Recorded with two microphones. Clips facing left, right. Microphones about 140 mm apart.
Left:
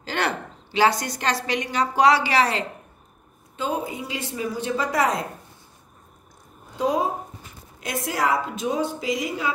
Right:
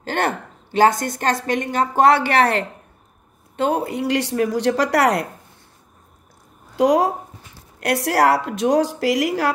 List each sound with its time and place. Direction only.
0.0 s a woman's voice: 50° right (ahead or behind); by 5.2 s 75° right (ahead or behind)
6.8 s speech: 90° right
7.5 s a woman's voice: 80° right